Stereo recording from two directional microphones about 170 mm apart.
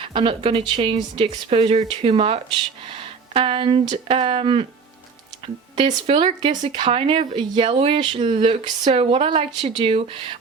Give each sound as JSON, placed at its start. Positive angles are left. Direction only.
{"t": 0.0, "sound": "speech", "side_deg": -30}
{"t": 5.7, "sound": "speech", "side_deg": -30}